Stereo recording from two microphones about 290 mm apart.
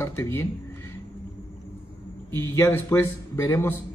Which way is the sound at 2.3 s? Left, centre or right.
Centre.